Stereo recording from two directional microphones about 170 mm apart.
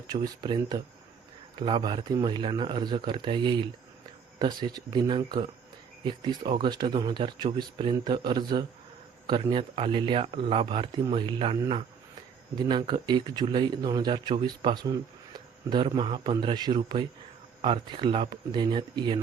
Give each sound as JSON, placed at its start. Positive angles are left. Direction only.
{"t": 0.1, "sound": "a man's voice", "side_deg": -25}
{"t": 12.5, "sound": "a man's voice", "side_deg": -30}